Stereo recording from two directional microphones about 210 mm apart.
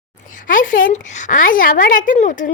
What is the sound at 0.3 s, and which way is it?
A woman's voice, 40° left (ahead or behind).